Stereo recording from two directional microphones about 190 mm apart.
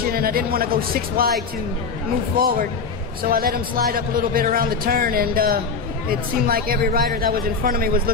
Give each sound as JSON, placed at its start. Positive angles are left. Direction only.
{"t": 0.0, "sound": "speech", "side_deg": -50}
{"t": 3.3, "sound": "speech", "side_deg": -50}